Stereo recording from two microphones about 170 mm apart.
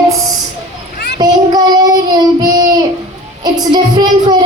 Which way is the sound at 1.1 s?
25° right (ahead or behind).